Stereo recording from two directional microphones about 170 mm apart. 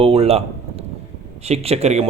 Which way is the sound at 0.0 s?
35° right (ahead or behind).